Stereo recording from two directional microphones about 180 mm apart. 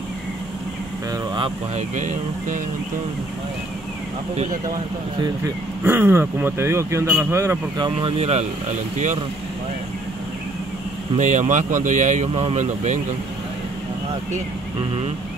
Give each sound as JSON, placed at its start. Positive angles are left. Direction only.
{"t": 1.1, "sound": "vehicle", "side_deg": -25}
{"t": 1.8, "sound": "speech", "side_deg": -45}
{"t": 5.2, "sound": "speech", "side_deg": -15}
{"t": 11.1, "sound": "speech", "side_deg": -40}